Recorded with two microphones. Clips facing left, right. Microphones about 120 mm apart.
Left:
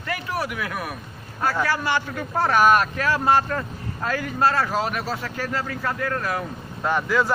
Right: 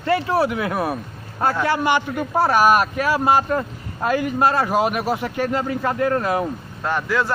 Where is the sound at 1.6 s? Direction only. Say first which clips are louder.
Right 4 dB; 20° right (ahead or behind).